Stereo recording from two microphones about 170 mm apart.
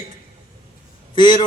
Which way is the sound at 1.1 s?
25° left (ahead or behind).